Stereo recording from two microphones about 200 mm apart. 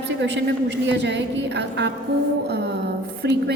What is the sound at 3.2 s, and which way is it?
Speech, 60° right (ahead or behind).